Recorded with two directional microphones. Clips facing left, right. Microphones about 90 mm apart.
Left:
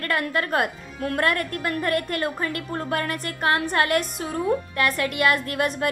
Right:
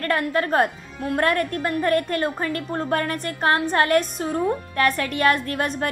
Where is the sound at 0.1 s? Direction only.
30° right (ahead or behind).